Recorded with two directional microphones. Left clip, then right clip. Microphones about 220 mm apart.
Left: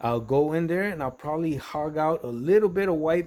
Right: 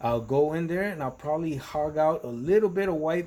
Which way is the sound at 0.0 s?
40° left (ahead or behind).